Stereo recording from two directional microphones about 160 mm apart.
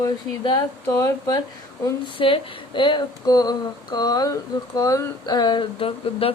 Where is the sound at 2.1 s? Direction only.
35° left (ahead or behind).